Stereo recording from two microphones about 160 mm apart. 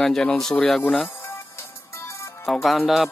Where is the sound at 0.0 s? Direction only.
5° left (ahead or behind).